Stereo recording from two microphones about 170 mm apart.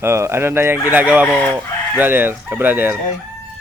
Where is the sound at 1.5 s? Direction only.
10° right (ahead or behind).